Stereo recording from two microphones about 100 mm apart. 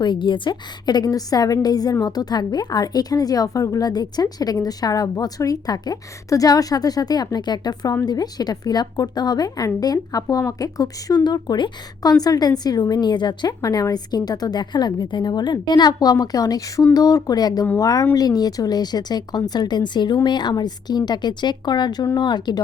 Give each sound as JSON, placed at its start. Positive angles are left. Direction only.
{"t": 0.0, "sound": "a woman's voice", "side_deg": 50}